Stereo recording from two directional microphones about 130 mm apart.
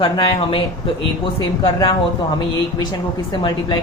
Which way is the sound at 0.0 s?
40° left (ahead or behind).